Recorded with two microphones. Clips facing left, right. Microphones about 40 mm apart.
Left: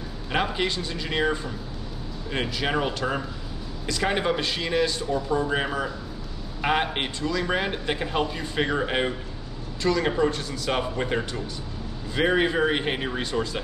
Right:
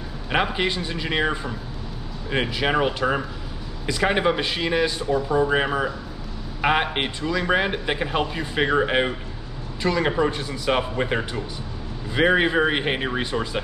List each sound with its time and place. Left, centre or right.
0.3 s speech: centre